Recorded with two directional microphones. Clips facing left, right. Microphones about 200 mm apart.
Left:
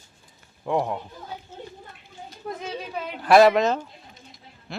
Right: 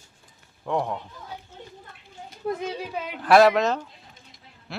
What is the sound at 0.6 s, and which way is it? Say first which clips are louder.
Speech: left 2 dB; 5° left (ahead or behind).